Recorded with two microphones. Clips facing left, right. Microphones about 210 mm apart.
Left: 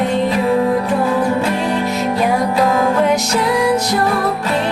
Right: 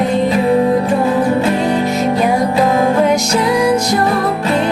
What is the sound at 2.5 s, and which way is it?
Music, 25° right (ahead or behind).